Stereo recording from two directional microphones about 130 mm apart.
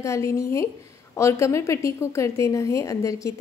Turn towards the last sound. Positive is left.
turn(degrees=25)  # may be behind; listen again after turning